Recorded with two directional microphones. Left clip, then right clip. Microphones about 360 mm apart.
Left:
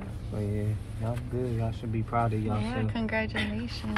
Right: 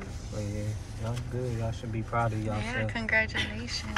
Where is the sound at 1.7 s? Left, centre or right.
Left.